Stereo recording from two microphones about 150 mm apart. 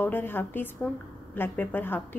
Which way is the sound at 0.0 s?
15° left (ahead or behind).